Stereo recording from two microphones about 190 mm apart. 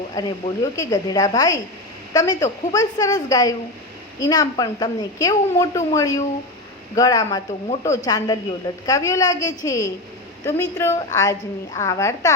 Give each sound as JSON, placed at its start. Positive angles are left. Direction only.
{"t": 0.2, "sound": "a woman's voice", "side_deg": 20}